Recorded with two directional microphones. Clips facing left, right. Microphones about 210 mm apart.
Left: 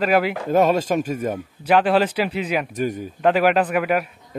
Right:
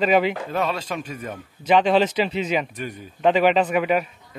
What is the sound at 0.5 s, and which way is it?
Speech, 45° left (ahead or behind).